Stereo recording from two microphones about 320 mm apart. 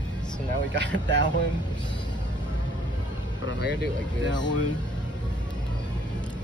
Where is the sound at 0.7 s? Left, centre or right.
Right.